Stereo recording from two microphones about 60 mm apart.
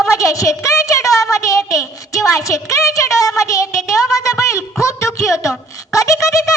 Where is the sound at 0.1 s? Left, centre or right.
Left.